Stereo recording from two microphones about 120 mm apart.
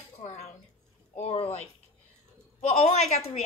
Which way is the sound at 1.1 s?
60° left (ahead or behind).